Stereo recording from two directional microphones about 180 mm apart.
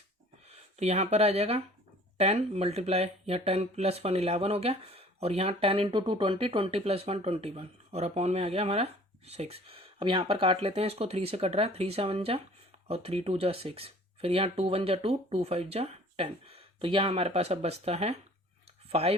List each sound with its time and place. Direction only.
0.4 s speech: 35° right (ahead or behind)